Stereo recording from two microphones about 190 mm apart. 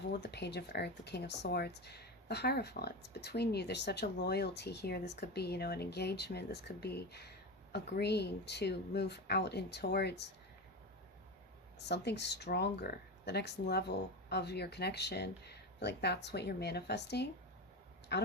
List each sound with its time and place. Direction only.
0.1 s speech: 60° left (ahead or behind)
11.8 s speech: 60° left (ahead or behind)